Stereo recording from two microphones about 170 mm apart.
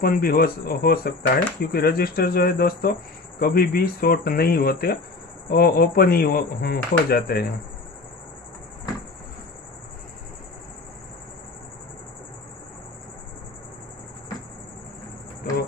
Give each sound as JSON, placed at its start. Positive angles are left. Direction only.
{"t": 0.0, "sound": "speech", "side_deg": 60}